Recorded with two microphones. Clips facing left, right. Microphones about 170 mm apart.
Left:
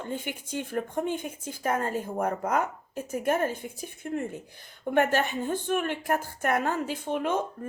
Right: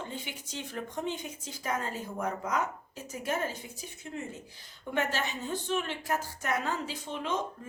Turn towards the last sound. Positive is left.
turn(degrees=55)  # may be behind; listen again after turning